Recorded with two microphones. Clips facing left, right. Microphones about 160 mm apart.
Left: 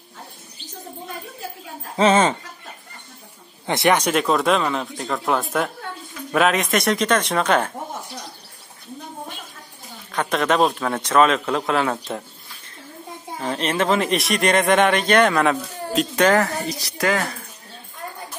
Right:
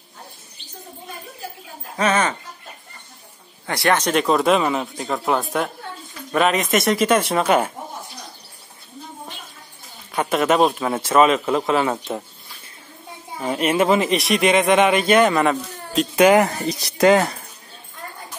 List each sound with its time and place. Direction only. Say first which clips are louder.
2.0 s speech: left 4 dB; 25° left (ahead or behind)
3.6 s speech: left 1 dB; 20° left (ahead or behind)
4.1 s speech: right 2 dB; centre (ahead or behind)
10.1 s speech: right 2 dB; 5° right (ahead or behind)
13.4 s speech: right 3 dB; 10° right (ahead or behind)
16.2 s speech: right 4 dB; 10° right (ahead or behind)
17.0 s speech: right 7 dB; 25° right (ahead or behind)